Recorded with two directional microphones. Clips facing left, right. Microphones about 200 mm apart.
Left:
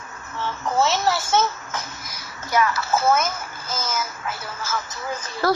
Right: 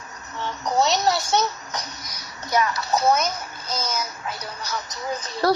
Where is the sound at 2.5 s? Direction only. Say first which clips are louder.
Left 1 dB; 20° right (ahead or behind).